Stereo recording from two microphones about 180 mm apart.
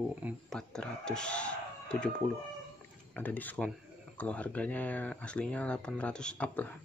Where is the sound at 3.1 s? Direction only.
10° left (ahead or behind).